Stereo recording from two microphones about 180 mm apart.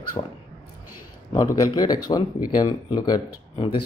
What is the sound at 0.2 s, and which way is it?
Speech, 25° left (ahead or behind).